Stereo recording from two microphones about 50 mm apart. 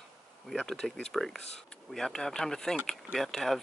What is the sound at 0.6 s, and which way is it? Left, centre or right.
Speech, centre.